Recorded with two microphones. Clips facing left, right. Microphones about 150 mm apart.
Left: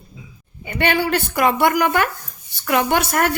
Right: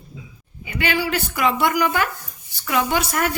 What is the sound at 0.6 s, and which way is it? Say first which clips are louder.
A woman's voice: left 4 dB; 50° left (ahead or behind).